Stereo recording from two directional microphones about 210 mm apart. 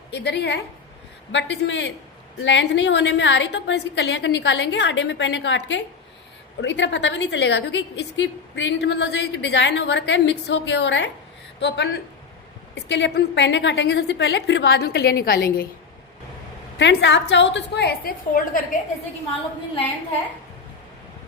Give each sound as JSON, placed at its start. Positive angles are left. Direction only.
{"t": 0.1, "sound": "a woman's voice", "side_deg": 55}
{"t": 12.7, "sound": "a woman's voice", "side_deg": 55}
{"t": 16.7, "sound": "a woman's voice", "side_deg": 55}